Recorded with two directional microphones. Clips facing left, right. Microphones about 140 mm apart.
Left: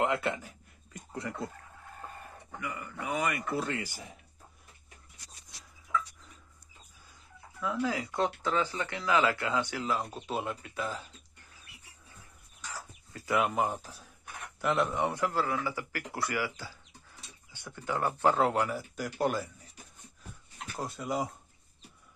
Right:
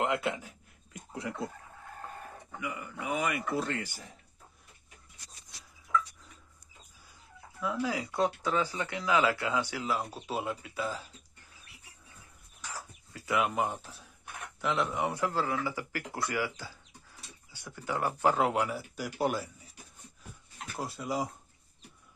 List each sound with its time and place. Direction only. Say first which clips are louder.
0.0 s a sound: left 1 dB; centre (ahead or behind)
2.6 s a sound: right 1 dB; 10° right (ahead or behind)
3.1 s speech: even; 5° right (ahead or behind)
7.6 s speech: left 1 dB; 15° right (ahead or behind)
13.2 s speech: left 1 dB; centre (ahead or behind)
15.3 s speech: even; 15° right (ahead or behind)
17.8 s speech: left 1 dB; 15° right (ahead or behind)
18.2 s speech: left 1 dB; 5° right (ahead or behind)
20.7 s speech: even; centre (ahead or behind)